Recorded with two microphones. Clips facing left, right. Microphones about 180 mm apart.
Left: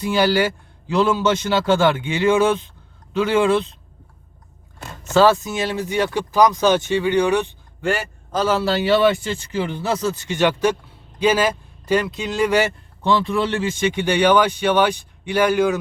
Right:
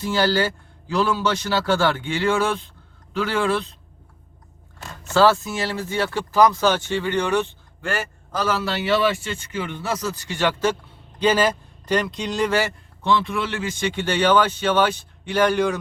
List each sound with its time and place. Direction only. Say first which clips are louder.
0.0 s speech: left 3 dB; 15° left (ahead or behind)
5.0 s speech: left 2 dB; 20° left (ahead or behind)
13.0 s speech: left 3 dB; 35° left (ahead or behind); by 15.8 s 5° left (ahead or behind)